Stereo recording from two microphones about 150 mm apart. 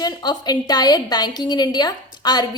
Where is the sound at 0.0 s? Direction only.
25° left (ahead or behind).